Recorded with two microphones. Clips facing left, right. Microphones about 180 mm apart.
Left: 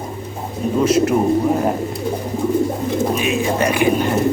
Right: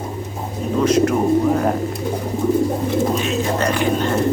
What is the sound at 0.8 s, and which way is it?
Speech, 10° left (ahead or behind).